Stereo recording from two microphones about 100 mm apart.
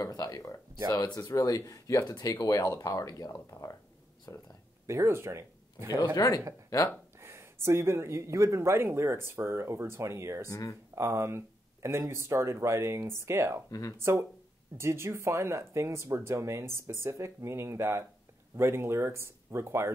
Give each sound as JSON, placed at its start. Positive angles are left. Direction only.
{"t": 0.0, "sound": "speech", "side_deg": 40}
{"t": 1.1, "sound": "speech", "side_deg": 35}
{"t": 4.8, "sound": "speech", "side_deg": -30}
{"t": 6.1, "sound": "speech", "side_deg": 40}
{"t": 7.2, "sound": "speech", "side_deg": -25}
{"t": 10.5, "sound": "speech", "side_deg": 30}
{"t": 11.0, "sound": "speech", "side_deg": -25}
{"t": 13.7, "sound": "speech", "side_deg": 35}
{"t": 14.8, "sound": "speech", "side_deg": -25}